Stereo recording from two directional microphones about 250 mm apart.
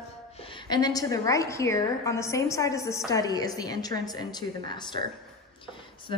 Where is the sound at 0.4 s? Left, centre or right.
Centre.